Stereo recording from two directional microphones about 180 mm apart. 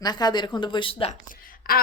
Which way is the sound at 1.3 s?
55° left (ahead or behind).